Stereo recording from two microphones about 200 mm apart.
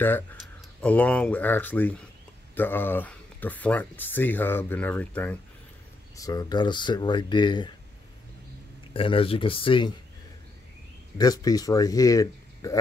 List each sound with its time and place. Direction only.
0.8 s speech: 5° left (ahead or behind)
6.1 s speech: 20° left (ahead or behind)
8.9 s speech: 25° left (ahead or behind)
11.1 s speech: 20° left (ahead or behind)